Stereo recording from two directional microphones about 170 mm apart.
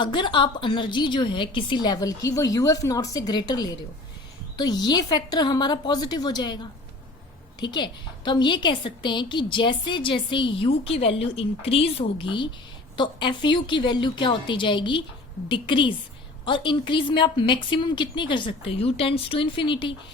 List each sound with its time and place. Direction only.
0.0 s a woman's voice: 25° left (ahead or behind)